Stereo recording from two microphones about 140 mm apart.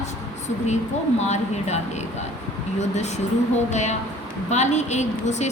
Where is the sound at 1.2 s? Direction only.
55° left (ahead or behind).